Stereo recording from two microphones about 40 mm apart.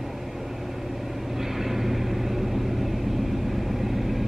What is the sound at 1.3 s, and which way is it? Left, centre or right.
Vehicle, centre.